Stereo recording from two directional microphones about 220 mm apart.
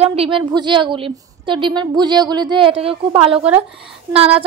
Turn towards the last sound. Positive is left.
turn(degrees=-25)  # may be behind; listen again after turning